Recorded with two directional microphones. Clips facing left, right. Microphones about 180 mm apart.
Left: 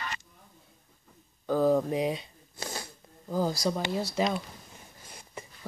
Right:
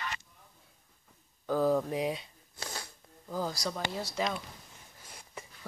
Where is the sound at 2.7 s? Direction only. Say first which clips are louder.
Left 4 dB; 20° left (ahead or behind).